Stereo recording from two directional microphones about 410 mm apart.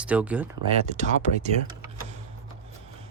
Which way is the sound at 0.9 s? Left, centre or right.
Centre.